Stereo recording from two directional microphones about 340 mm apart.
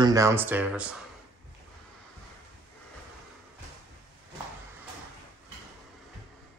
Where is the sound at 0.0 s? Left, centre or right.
Centre.